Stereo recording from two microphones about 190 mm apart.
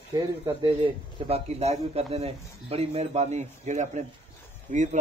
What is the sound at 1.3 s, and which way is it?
A man's voice, 35° right (ahead or behind).